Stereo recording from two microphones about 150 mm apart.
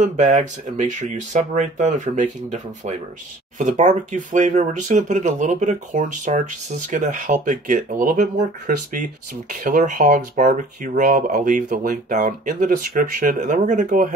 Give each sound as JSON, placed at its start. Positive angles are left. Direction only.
{"t": 0.0, "sound": "speech", "side_deg": -55}